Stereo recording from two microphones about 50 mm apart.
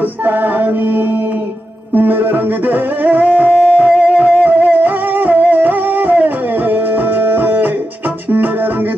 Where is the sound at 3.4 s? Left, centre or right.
Centre.